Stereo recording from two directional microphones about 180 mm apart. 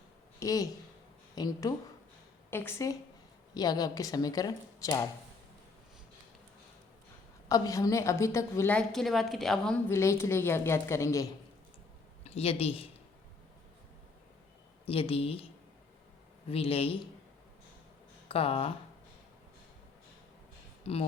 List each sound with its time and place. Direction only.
0.3 s a woman's voice: 20° left (ahead or behind)
7.4 s a woman's voice: 20° left (ahead or behind); by 9.8 s centre (ahead or behind)
9.9 s a woman's voice: 15° left (ahead or behind)
12.2 s speech: 35° left (ahead or behind)
14.8 s a man's voice: 30° left (ahead or behind)
16.5 s a man's voice: 30° left (ahead or behind)
18.3 s speech: 30° left (ahead or behind)